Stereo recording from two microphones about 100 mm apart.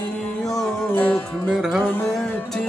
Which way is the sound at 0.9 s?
15° left (ahead or behind).